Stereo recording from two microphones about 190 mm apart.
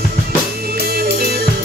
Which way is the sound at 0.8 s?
55° right (ahead or behind).